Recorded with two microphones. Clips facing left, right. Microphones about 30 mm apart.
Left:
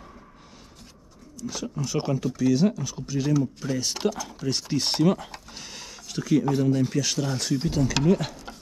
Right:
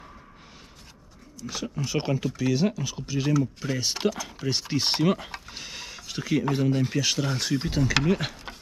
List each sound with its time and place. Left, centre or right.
1.4 s speech: centre